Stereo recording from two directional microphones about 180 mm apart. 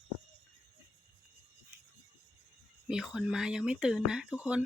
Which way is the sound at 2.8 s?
5° right (ahead or behind).